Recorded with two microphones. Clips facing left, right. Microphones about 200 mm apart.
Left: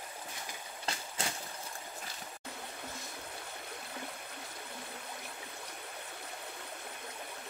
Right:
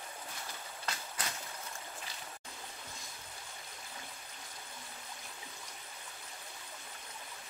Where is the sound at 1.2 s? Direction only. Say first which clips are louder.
Left 4 dB; 25° left (ahead or behind).